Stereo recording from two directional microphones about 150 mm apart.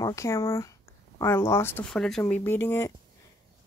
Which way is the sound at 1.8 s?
5° left (ahead or behind).